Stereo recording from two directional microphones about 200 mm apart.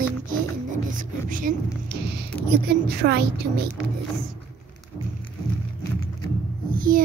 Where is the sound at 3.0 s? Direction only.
55° right (ahead or behind).